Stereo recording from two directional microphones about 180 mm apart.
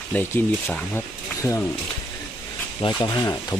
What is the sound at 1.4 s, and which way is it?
Speech, 15° left (ahead or behind).